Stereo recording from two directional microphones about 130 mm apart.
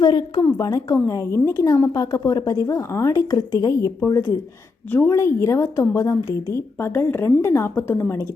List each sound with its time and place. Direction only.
0.0 s a woman's voice: 35° left (ahead or behind)
0.4 s a woman's voice: 25° left (ahead or behind)